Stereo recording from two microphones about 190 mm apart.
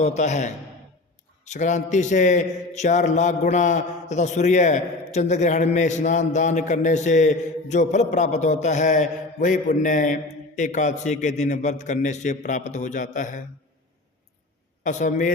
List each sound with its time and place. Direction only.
0.0 s a man's voice: 35° left (ahead or behind)
14.8 s a man's voice: 40° left (ahead or behind)